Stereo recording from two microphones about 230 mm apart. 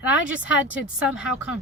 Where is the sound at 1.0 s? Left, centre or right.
Centre.